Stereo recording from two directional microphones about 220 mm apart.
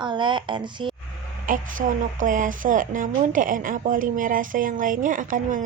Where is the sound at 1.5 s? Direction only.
40° right (ahead or behind).